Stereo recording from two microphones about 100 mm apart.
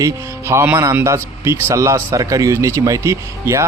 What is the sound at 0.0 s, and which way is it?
Speech, 25° right (ahead or behind).